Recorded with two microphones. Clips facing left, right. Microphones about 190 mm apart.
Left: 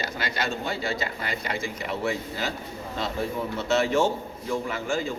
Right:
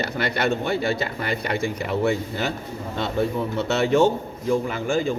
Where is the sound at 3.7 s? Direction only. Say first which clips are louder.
Right 4 dB; 60° right (ahead or behind).